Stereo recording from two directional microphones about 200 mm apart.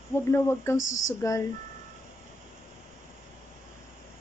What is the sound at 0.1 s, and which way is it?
Speech, 15° left (ahead or behind).